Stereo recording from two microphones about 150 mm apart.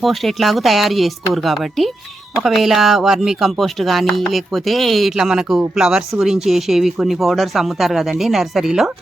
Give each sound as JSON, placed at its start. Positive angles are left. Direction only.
{"t": 0.0, "sound": "speech", "side_deg": 0}